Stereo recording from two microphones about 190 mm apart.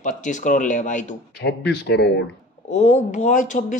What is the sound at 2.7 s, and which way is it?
Speech, 40° left (ahead or behind).